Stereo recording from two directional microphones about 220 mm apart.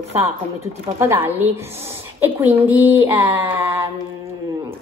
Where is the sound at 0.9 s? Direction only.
10° right (ahead or behind).